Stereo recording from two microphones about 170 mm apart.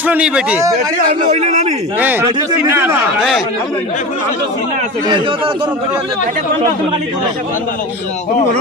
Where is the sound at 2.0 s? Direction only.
10° right (ahead or behind).